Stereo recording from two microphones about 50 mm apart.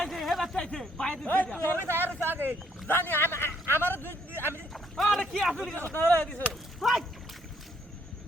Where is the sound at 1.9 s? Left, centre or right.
Right.